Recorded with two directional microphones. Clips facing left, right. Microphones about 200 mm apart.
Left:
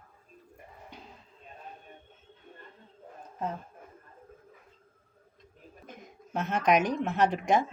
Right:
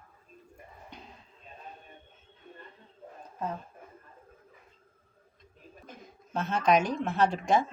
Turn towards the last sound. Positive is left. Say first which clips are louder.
# even
turn(degrees=20)  # may be behind; listen again after turning